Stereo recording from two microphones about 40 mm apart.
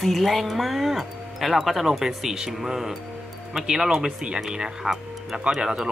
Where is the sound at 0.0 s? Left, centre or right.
Centre.